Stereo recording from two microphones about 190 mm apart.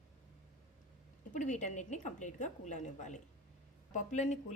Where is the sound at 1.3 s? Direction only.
40° left (ahead or behind).